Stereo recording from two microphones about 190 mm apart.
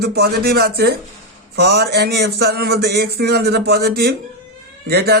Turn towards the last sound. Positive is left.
turn(degrees=-55)  # may be behind; listen again after turning